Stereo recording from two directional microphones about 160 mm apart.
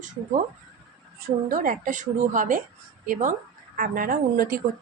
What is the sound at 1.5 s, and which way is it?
A woman's voice, 55° right (ahead or behind).